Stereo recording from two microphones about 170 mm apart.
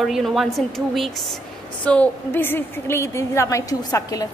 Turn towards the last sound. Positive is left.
turn(degrees=20)  # may be behind; listen again after turning